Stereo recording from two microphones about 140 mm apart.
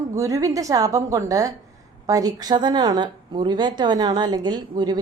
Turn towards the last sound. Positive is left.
turn(degrees=-30)  # may be behind; listen again after turning